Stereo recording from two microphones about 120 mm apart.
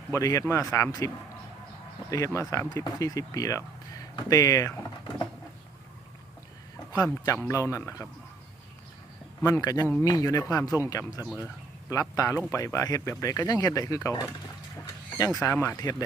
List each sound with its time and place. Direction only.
0.1 s speech: 25° left (ahead or behind)
2.0 s speech: 30° left (ahead or behind)
6.9 s speech: 30° left (ahead or behind)
9.5 s speech: 30° left (ahead or behind)
11.3 s speech: 10° right (ahead or behind)
11.9 s speech: 25° left (ahead or behind)